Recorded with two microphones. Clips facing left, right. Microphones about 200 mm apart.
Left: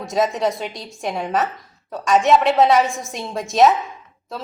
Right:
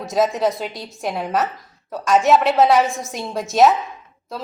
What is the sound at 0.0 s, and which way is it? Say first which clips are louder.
Speech: right 1 dB; centre (ahead or behind).